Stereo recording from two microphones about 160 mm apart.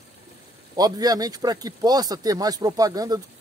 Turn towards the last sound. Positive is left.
turn(degrees=-20)  # may be behind; listen again after turning